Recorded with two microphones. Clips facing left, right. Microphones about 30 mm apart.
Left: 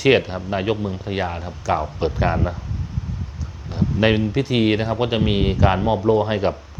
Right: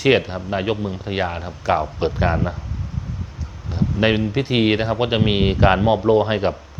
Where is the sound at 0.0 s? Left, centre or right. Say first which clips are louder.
Even; centre.